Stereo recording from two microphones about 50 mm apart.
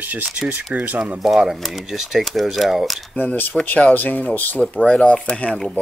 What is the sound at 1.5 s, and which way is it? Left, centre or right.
Speech, centre.